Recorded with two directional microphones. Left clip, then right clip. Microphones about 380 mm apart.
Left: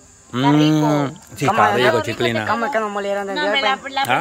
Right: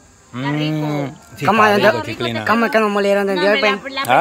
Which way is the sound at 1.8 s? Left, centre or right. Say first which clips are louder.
Right 1 dB; centre.